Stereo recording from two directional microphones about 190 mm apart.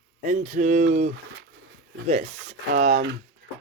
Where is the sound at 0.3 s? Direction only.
40° right (ahead or behind).